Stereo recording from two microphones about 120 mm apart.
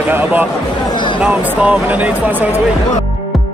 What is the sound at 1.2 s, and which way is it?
Speech, 10° right (ahead or behind).